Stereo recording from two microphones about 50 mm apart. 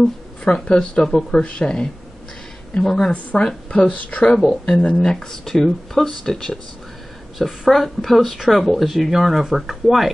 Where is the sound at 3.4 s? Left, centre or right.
Left.